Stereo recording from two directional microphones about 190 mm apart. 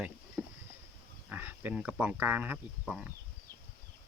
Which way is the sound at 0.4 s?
10° right (ahead or behind).